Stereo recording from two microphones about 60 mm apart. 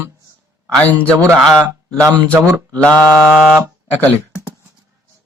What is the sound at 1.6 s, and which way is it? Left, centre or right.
Speech, right.